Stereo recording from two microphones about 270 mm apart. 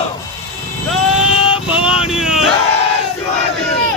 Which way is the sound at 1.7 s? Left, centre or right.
Centre.